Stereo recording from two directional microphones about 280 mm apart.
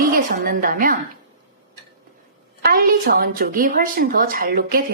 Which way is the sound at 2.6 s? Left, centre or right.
Right.